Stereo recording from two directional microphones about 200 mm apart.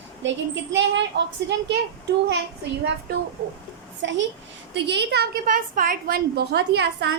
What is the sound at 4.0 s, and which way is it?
A child's voice, 65° right (ahead or behind).